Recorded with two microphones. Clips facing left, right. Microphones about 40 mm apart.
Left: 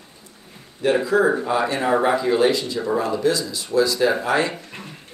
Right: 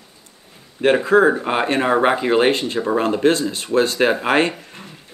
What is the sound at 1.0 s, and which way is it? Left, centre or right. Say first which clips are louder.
Speech: right 4 dB; right.